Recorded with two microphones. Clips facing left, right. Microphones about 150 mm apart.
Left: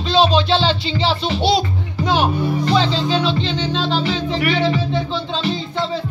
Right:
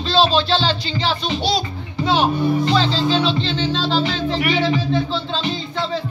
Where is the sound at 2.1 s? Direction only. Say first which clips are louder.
Right 1 dB; 10° left (ahead or behind).